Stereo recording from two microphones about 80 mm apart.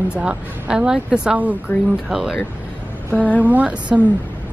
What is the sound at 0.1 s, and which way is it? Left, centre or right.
Speech, centre.